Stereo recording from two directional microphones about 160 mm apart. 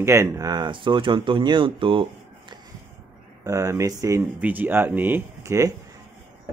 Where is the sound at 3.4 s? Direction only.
20° right (ahead or behind).